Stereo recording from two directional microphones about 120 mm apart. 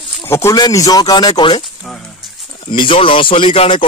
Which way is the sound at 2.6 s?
45° left (ahead or behind).